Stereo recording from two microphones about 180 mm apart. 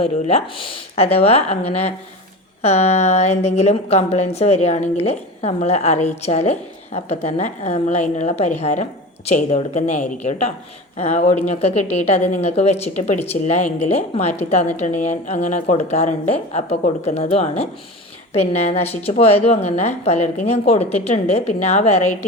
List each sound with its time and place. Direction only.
0.0 s speech: 35° left (ahead or behind)